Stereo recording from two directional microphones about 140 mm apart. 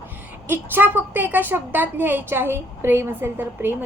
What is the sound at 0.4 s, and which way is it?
A woman's voice, 15° right (ahead or behind).